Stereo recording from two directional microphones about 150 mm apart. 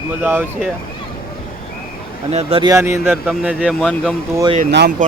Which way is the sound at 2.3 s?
40° right (ahead or behind).